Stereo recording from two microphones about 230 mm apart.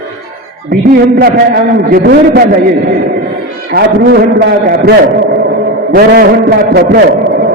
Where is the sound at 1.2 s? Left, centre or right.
Right.